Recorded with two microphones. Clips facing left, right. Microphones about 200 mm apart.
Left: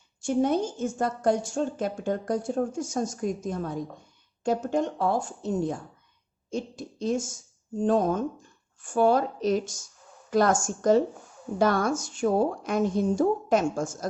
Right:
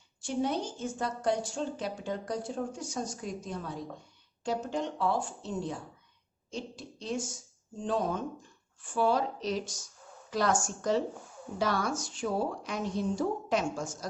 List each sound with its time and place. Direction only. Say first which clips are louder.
0.3 s a woman's voice: left 7 dB; 50° left (ahead or behind)